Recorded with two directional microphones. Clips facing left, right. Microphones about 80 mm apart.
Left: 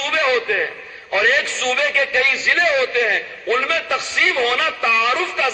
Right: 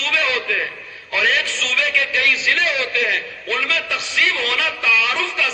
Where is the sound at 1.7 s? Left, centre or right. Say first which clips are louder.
Left 4 dB; left.